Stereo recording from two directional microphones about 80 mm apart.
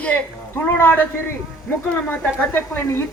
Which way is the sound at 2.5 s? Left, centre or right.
Left.